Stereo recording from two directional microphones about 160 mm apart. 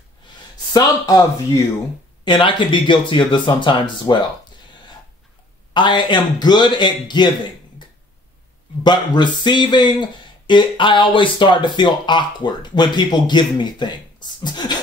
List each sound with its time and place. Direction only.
0.7 s speech: 25° left (ahead or behind)
5.7 s speech: 30° left (ahead or behind)
8.8 s speech: 30° left (ahead or behind)